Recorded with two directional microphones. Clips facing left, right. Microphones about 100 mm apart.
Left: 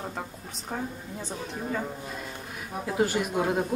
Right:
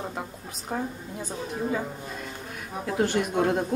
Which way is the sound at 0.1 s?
5° right (ahead or behind).